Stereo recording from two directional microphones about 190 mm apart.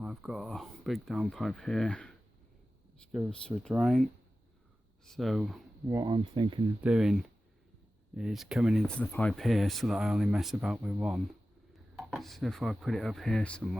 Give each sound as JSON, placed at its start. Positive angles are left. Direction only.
{"t": 0.0, "sound": "speech", "side_deg": 0}
{"t": 5.9, "sound": "speech", "side_deg": -20}
{"t": 6.8, "sound": "speech", "side_deg": 0}